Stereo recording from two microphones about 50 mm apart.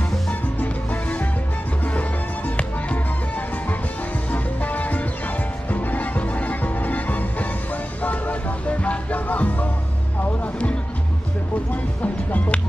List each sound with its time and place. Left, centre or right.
0.3 s music: left